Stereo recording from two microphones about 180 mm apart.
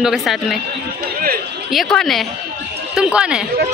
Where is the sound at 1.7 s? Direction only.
Centre (ahead or behind).